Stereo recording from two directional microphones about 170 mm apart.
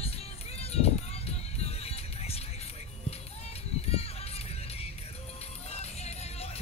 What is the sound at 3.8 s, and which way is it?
Music, 35° left (ahead or behind).